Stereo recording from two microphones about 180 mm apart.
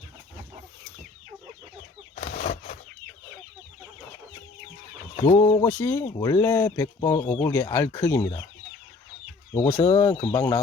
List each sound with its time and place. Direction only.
2.1 s a sound: 50° left (ahead or behind)
5.1 s speech: 20° left (ahead or behind)
9.7 s speech: 35° left (ahead or behind)
10.2 s speech: 20° left (ahead or behind)